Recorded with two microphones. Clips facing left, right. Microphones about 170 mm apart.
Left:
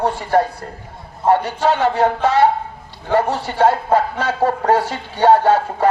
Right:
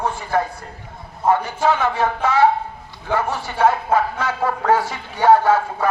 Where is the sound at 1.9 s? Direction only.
70° left (ahead or behind).